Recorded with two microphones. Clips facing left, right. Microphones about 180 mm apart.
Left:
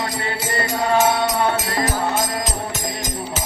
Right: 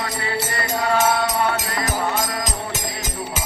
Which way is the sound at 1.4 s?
35° left (ahead or behind).